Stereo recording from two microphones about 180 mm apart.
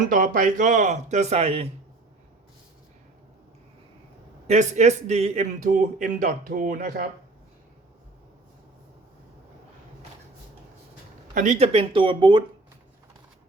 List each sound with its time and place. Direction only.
0.1 s speech: 50° right (ahead or behind)
4.4 s a man's voice: 40° right (ahead or behind)
11.3 s speech: 40° right (ahead or behind)